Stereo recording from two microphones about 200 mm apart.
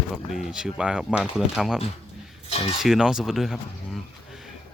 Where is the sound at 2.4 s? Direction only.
30° left (ahead or behind).